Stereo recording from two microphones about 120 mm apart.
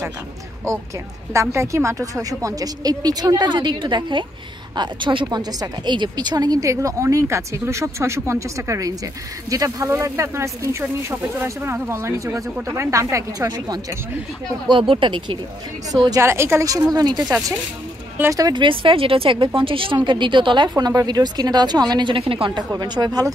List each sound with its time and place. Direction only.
1.3 s a woman's voice: 25° right (ahead or behind)
14.7 s speech: 45° right (ahead or behind)
15.9 s a woman's voice: 25° right (ahead or behind)
18.1 s speech: 20° right (ahead or behind)
18.4 s speech: 40° right (ahead or behind)
22.6 s speech: 35° right (ahead or behind)